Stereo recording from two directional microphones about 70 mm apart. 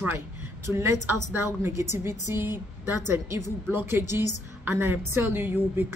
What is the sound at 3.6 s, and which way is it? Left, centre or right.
A woman's voice, right.